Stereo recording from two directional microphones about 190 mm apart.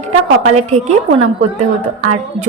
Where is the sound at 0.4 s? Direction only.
35° right (ahead or behind).